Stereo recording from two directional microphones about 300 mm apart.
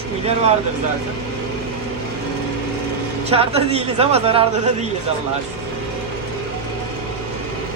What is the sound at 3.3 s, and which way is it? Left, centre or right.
A man's voice, centre.